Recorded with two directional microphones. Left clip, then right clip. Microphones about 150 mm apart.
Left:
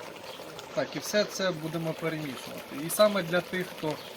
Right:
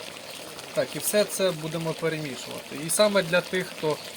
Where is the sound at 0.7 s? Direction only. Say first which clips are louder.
Right 4 dB; 55° right (ahead or behind).